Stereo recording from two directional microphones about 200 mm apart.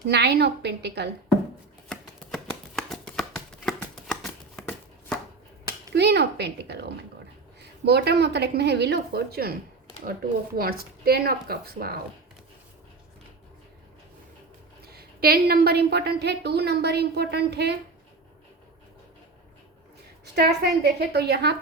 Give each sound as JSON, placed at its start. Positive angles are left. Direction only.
{"t": 0.1, "sound": "a woman's voice", "side_deg": -55}
{"t": 1.9, "sound": "a sound", "side_deg": 5}
{"t": 5.9, "sound": "a woman's voice", "side_deg": -55}
{"t": 14.8, "sound": "a woman's voice", "side_deg": -50}
{"t": 20.3, "sound": "a woman's voice", "side_deg": -55}